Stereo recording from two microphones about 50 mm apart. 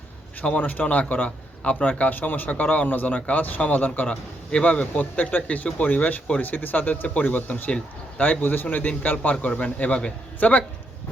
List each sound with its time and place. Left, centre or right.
0.6 s a man's voice: left